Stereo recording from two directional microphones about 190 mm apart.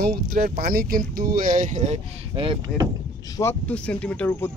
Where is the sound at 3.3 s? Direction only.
10° left (ahead or behind).